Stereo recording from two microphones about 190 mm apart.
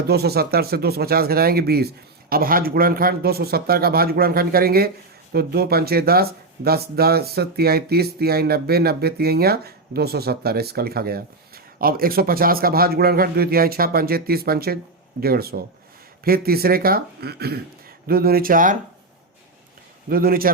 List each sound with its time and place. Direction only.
0.1 s speech: 55° right (ahead or behind)
20.1 s speech: 50° right (ahead or behind)